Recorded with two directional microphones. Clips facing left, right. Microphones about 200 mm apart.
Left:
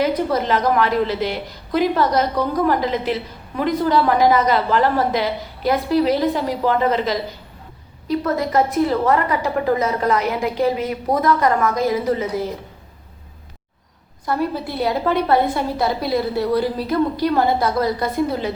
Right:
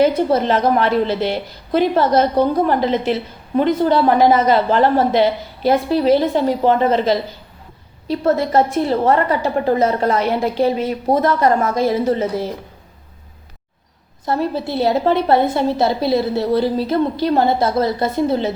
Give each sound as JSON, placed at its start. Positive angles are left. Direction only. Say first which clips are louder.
{"t": 0.0, "sound": "a woman's voice", "louder": "right 4 dB", "side_deg": -30}
{"t": 14.3, "sound": "a woman's voice", "louder": "right 2 dB", "side_deg": -25}